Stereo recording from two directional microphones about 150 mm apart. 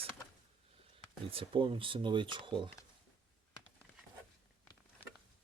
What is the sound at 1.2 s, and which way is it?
Speech, 35° right (ahead or behind).